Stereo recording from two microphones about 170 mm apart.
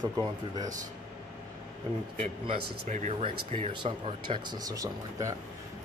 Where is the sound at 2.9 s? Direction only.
45° right (ahead or behind); by 5.4 s 20° right (ahead or behind).